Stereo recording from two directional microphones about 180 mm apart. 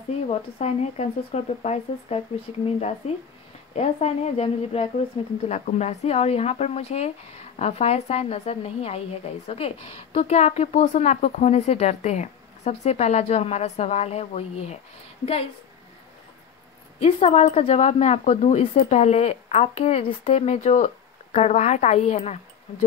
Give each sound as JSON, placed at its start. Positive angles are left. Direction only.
{"t": 0.3, "sound": "a woman's voice", "side_deg": 35}
{"t": 17.0, "sound": "a woman's voice", "side_deg": 40}